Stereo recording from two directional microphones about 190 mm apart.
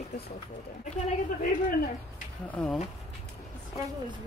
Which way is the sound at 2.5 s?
5° left (ahead or behind).